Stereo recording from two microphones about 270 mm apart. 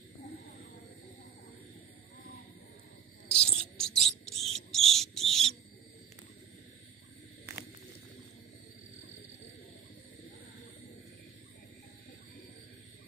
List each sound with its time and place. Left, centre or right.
3.3 s bird: centre